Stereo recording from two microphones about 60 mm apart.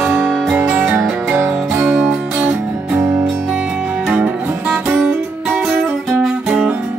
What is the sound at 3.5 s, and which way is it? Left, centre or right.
Music, centre.